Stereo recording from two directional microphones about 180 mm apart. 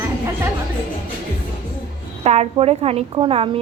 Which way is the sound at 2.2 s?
35° right (ahead or behind).